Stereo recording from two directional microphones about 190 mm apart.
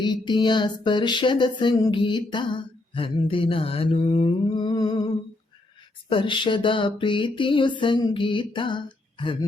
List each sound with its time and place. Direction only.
0.0 s music: 25° left (ahead or behind)
6.1 s music: 25° left (ahead or behind)